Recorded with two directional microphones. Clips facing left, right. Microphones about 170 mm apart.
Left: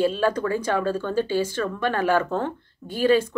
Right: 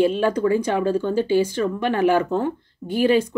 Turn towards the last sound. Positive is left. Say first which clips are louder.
# right 2 dB
turn(degrees=-15)  # may be behind; listen again after turning